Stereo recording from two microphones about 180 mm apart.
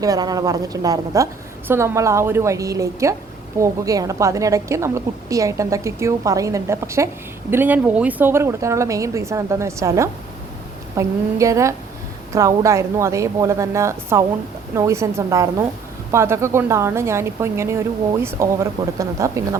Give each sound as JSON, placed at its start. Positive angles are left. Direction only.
{"t": 0.0, "sound": "a woman's voice", "side_deg": -20}